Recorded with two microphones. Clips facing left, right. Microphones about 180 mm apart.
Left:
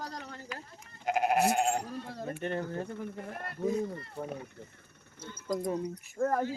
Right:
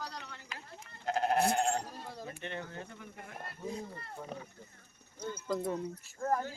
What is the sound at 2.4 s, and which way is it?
Speech, 40° left (ahead or behind).